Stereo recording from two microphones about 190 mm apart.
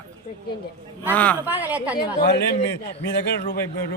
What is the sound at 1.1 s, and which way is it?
Speech, 5° left (ahead or behind).